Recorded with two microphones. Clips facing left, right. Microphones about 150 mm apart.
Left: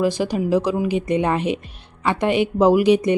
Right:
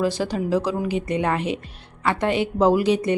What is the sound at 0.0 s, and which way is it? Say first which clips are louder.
A woman's voice: left 3 dB; 15° left (ahead or behind).